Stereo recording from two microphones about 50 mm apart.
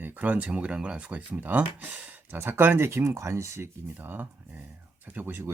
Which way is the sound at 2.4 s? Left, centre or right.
Right.